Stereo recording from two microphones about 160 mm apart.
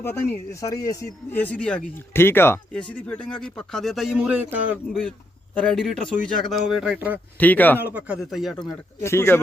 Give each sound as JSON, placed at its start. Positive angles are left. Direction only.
{"t": 0.0, "sound": "speech", "side_deg": 15}
{"t": 1.4, "sound": "speech", "side_deg": 10}
{"t": 5.5, "sound": "speech", "side_deg": 5}
{"t": 7.3, "sound": "a man's voice", "side_deg": 10}
{"t": 7.8, "sound": "speech", "side_deg": -10}
{"t": 9.0, "sound": "a man's voice", "side_deg": 15}